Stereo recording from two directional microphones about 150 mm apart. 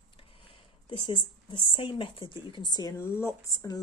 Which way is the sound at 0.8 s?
35° left (ahead or behind).